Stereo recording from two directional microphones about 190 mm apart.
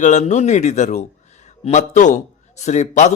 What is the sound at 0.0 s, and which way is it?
A man's voice, 40° left (ahead or behind).